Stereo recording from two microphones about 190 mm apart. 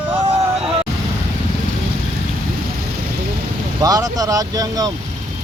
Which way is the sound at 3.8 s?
20° right (ahead or behind).